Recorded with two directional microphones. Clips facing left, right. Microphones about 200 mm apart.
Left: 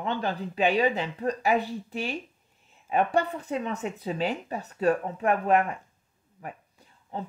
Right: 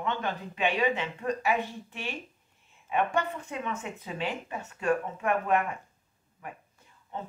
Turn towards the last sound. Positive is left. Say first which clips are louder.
# left 3 dB
turn(degrees=35)  # may be behind; listen again after turning